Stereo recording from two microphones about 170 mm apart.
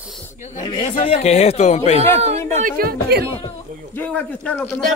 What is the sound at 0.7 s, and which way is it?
Speech, 35° left (ahead or behind).